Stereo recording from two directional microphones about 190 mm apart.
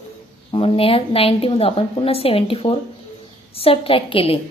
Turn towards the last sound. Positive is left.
turn(degrees=30)  # may be behind; listen again after turning